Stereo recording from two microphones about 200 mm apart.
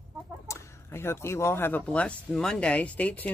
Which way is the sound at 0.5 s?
10° left (ahead or behind).